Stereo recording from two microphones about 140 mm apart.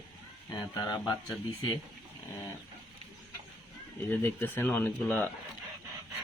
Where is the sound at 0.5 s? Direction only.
30° left (ahead or behind).